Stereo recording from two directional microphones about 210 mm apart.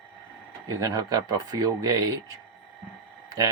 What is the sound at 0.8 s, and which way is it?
Speech, 15° right (ahead or behind).